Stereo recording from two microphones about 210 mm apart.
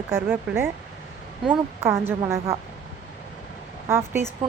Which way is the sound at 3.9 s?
10° right (ahead or behind).